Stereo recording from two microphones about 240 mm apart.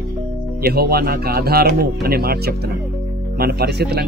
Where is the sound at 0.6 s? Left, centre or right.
Right.